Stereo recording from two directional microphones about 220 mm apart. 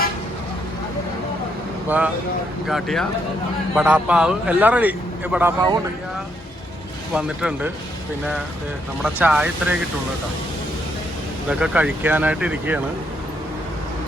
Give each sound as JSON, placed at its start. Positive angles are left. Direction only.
{"t": 2.6, "sound": "a man's voice", "side_deg": 0}
{"t": 7.1, "sound": "a man's voice", "side_deg": -5}
{"t": 9.0, "sound": "a man's voice", "side_deg": -5}
{"t": 11.4, "sound": "a man's voice", "side_deg": -5}